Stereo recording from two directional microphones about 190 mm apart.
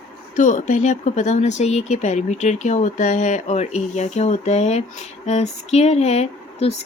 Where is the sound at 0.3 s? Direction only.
40° left (ahead or behind).